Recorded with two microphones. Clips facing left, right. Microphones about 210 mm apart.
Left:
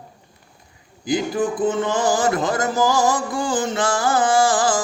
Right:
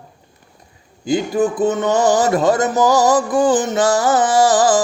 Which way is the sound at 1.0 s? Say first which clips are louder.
Right 4 dB; 25° right (ahead or behind).